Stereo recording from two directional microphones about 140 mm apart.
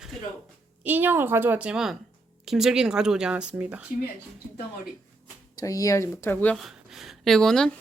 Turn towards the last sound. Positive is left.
turn(degrees=5)  # may be behind; listen again after turning